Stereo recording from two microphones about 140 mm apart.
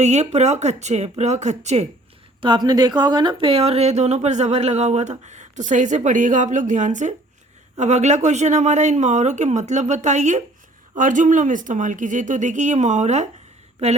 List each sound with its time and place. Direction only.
0.0 s speech: 55° right (ahead or behind)
2.4 s speech: 35° right (ahead or behind); by 13.2 s 55° right (ahead or behind)